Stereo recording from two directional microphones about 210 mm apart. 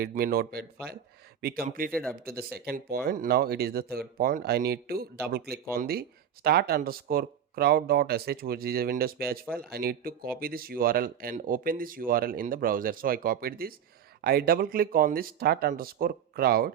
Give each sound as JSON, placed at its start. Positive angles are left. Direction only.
{"t": 0.0, "sound": "speech", "side_deg": -45}
{"t": 1.9, "sound": "speech", "side_deg": 5}
{"t": 2.1, "sound": "speech", "side_deg": -45}